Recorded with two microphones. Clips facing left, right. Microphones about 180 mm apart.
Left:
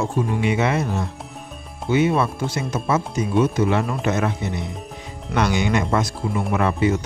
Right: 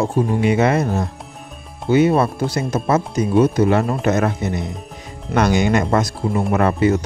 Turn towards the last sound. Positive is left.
turn(degrees=-45)  # may be behind; listen again after turning